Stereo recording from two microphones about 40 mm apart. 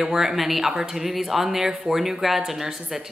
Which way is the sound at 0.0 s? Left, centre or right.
Centre.